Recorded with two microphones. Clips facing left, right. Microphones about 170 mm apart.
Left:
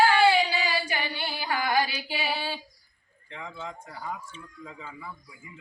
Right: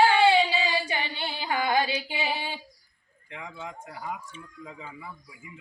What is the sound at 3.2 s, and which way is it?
Speech, 10° right (ahead or behind).